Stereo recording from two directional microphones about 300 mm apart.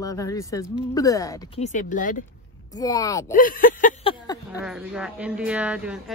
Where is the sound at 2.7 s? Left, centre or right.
Centre.